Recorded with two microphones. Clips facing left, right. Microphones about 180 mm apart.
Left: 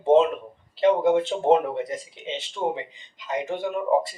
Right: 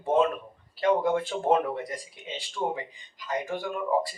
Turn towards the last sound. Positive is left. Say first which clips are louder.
# left 4 dB
turn(degrees=25)  # may be behind; listen again after turning